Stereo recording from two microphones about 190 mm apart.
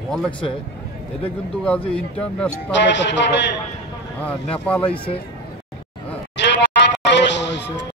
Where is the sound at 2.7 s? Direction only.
70° left (ahead or behind).